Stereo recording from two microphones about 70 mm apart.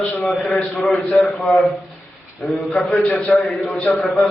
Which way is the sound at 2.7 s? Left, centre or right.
Centre.